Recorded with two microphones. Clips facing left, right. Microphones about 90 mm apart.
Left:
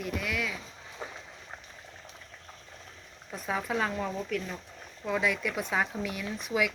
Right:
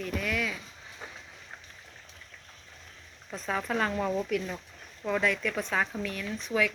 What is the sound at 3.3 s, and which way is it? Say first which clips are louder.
Speech: right 1 dB; 10° left (ahead or behind).